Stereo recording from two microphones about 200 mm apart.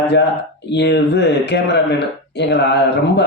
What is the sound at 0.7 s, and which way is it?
A man's voice, 60° left (ahead or behind).